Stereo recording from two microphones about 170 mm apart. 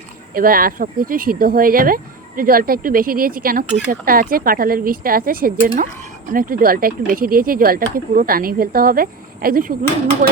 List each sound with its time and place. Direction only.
0.3 s speech: 60° right (ahead or behind)